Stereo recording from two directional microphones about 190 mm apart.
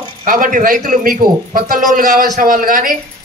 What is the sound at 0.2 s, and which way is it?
Speech, 45° right (ahead or behind).